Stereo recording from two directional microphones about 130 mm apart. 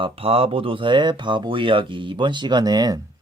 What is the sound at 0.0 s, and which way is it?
Speech, 45° right (ahead or behind).